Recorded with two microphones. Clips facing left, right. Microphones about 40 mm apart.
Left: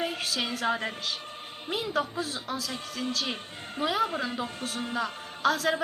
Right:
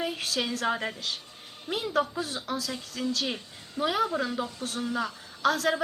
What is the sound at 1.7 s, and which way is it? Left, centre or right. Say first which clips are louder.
A woman's voice: right 2 dB; centre.